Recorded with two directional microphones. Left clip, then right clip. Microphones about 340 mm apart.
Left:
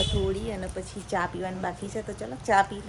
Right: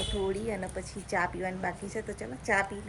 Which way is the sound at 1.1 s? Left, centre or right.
Centre.